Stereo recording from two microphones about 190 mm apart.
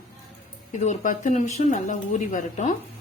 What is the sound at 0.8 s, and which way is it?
A woman's voice, 40° left (ahead or behind).